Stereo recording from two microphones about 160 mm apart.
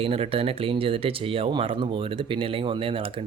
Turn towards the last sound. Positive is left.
turn(degrees=-35)  # may be behind; listen again after turning